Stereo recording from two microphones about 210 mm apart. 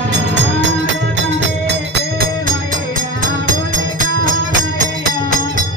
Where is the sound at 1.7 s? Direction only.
45° right (ahead or behind).